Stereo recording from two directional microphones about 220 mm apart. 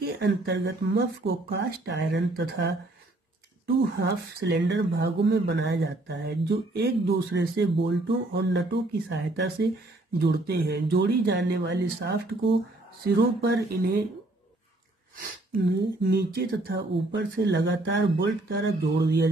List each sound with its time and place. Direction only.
0.0 s speech: 50° right (ahead or behind)
15.1 s speech: 40° right (ahead or behind)